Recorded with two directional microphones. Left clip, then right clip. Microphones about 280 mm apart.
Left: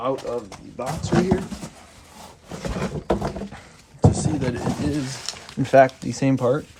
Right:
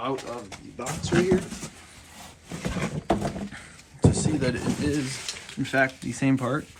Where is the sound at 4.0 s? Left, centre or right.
Centre.